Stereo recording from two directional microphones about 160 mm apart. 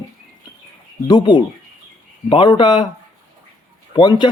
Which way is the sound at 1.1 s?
25° left (ahead or behind).